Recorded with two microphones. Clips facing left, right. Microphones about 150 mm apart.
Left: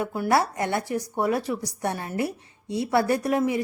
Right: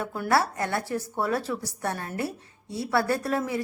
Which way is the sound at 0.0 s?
10° left (ahead or behind).